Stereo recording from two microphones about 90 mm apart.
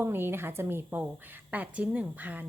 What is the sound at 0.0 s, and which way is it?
A woman's voice, 25° right (ahead or behind).